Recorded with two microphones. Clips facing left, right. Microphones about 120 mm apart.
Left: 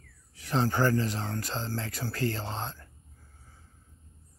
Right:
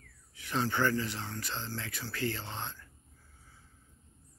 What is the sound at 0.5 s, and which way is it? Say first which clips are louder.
Speech: left 4 dB; 40° left (ahead or behind).